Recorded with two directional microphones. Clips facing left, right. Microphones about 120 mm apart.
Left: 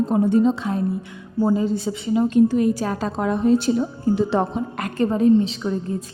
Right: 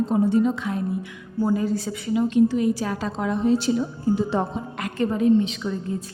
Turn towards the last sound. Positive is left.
turn(degrees=35)  # may be behind; listen again after turning